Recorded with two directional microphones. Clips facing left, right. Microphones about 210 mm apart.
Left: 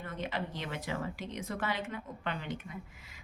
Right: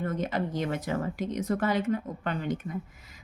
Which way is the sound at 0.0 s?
45° right (ahead or behind).